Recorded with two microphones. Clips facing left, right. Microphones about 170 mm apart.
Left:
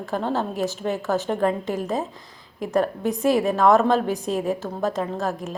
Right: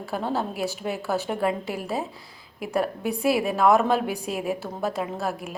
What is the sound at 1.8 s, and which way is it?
Speech, 40° left (ahead or behind).